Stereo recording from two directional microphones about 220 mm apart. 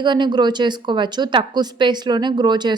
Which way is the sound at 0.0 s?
20° right (ahead or behind).